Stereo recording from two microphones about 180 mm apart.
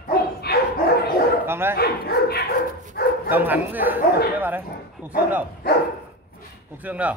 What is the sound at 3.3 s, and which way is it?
Speech, 10° right (ahead or behind).